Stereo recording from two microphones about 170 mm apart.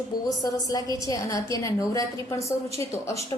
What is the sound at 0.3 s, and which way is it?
A woman's voice, 20° left (ahead or behind).